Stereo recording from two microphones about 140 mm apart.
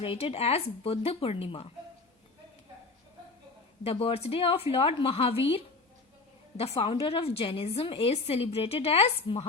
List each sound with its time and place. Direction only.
0.0 s a woman's voice: 40° left (ahead or behind)
3.8 s a woman's voice: 45° left (ahead or behind)